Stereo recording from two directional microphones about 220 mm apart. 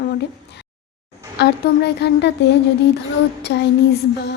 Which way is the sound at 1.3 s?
50° left (ahead or behind).